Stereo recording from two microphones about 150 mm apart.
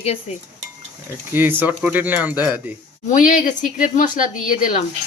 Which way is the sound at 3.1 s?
65° left (ahead or behind).